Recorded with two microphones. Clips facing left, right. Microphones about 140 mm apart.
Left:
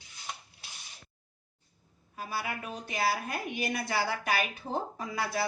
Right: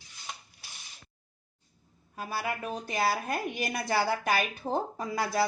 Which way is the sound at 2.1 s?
45° right (ahead or behind).